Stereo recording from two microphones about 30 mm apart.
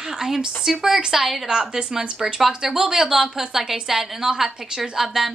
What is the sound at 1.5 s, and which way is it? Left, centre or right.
A woman's voice, right.